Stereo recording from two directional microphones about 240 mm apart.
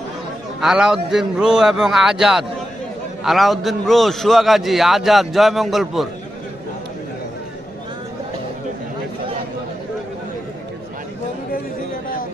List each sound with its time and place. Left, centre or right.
0.6 s a man's voice: centre